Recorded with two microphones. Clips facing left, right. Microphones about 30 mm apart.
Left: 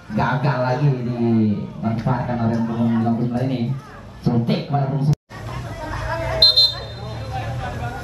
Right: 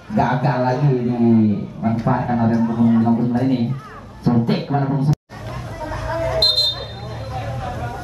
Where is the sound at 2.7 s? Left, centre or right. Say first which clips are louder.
Right 4 dB; centre.